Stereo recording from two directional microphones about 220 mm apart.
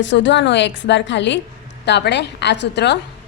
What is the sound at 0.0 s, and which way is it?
A woman's voice, 55° left (ahead or behind).